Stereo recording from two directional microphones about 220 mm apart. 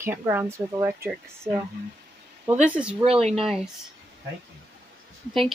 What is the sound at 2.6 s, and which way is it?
Speech, 5° right (ahead or behind).